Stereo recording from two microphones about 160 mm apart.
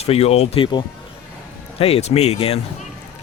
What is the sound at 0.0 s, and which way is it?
Speech, 40° left (ahead or behind).